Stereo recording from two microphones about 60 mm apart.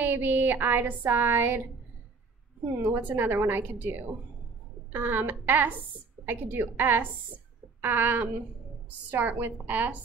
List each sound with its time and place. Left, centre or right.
0.0 s a woman's voice: right
2.8 s a woman's voice: right